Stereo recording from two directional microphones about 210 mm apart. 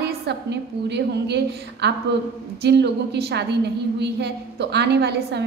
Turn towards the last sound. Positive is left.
turn(degrees=-50)  # may be behind; listen again after turning